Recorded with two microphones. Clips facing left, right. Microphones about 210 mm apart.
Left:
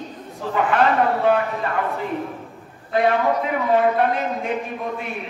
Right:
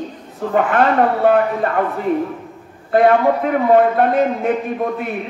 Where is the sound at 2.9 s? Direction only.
50° right (ahead or behind).